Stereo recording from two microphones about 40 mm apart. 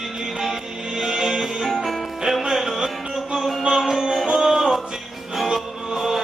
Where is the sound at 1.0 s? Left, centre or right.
Centre.